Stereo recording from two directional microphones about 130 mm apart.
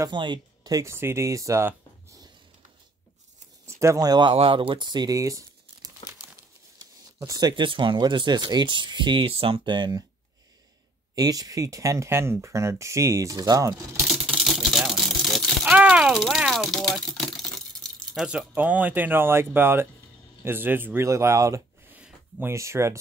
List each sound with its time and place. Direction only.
0.0 s speech: 35° right (ahead or behind); by 2.2 s 20° right (ahead or behind)
3.6 s speech: 20° right (ahead or behind)
11.1 s speech: 30° right (ahead or behind)
14.2 s a sound: 5° right (ahead or behind)
20.4 s speech: 15° right (ahead or behind)
21.9 s a sound: 15° right (ahead or behind)